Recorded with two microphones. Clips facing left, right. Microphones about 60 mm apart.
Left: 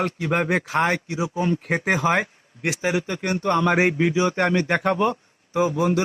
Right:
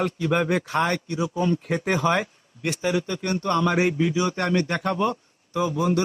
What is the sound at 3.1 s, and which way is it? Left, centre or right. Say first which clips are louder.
A man's voice: left 2 dB; left.